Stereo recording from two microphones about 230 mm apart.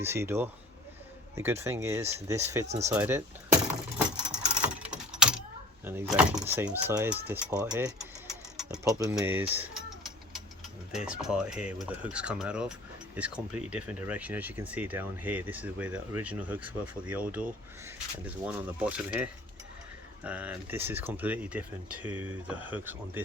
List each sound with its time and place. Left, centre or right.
0.0 s speech: centre
2.6 s speech: right
2.9 s speech: centre
3.9 s a sound: centre
5.8 s speech: centre
8.5 s a sound: centre
8.9 s speech: centre
10.9 s speech: centre